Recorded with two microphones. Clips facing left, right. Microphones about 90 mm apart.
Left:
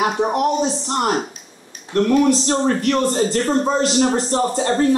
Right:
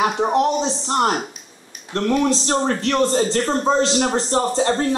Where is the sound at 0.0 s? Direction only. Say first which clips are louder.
Even; 25° right (ahead or behind).